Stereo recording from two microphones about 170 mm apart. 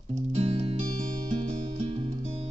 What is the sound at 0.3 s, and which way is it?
Music, 40° right (ahead or behind).